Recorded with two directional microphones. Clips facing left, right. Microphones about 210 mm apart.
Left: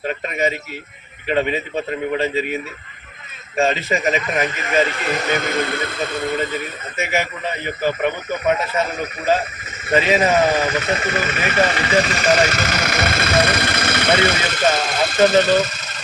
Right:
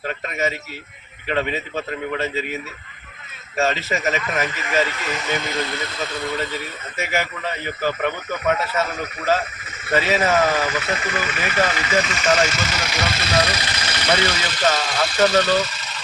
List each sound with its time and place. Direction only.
0.0 s a man's voice: 15° left (ahead or behind)
3.6 s speech: 30° left (ahead or behind)
4.0 s a man's voice: 15° left (ahead or behind)
4.9 s speech: 35° left (ahead or behind)
5.1 s speech: 55° left (ahead or behind)
7.0 s a man's voice: 10° left (ahead or behind); by 12.1 s 40° left (ahead or behind)
12.1 s speech: 55° left (ahead or behind)